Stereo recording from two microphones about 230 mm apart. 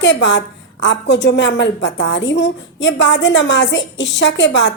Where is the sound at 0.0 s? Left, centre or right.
Left.